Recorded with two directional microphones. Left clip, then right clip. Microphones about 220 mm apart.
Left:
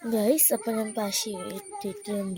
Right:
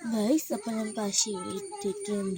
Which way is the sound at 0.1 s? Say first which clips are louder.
Left 4 dB; 30° left (ahead or behind).